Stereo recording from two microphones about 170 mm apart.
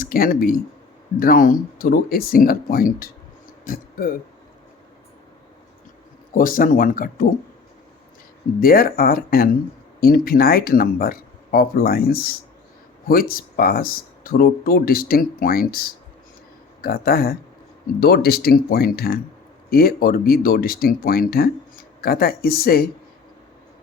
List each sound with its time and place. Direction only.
0.0 s speech: 55° left (ahead or behind)
6.3 s speech: 55° left (ahead or behind)
8.6 s speech: 60° left (ahead or behind)